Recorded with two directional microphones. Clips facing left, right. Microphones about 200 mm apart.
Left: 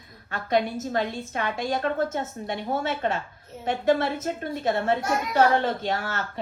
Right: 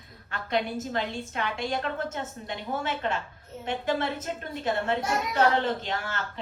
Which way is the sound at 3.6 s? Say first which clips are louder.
Left 6 dB; 45° left (ahead or behind).